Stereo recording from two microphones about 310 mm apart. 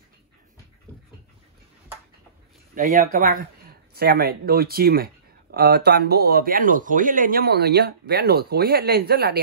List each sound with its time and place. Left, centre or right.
2.7 s speech: right